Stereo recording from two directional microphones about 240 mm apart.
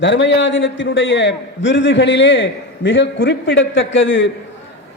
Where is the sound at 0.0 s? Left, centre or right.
Left.